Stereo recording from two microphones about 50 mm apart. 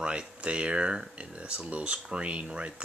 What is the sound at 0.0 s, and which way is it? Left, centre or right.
Speech, centre.